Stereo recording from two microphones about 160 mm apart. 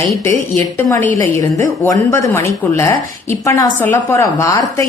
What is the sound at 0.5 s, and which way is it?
A woman's voice, 15° left (ahead or behind).